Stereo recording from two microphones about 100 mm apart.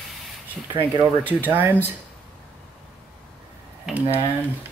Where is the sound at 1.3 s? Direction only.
15° right (ahead or behind).